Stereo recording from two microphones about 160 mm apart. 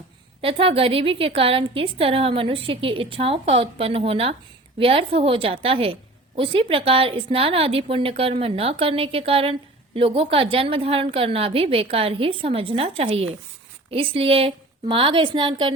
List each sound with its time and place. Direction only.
0.4 s a woman's voice: 35° right (ahead or behind)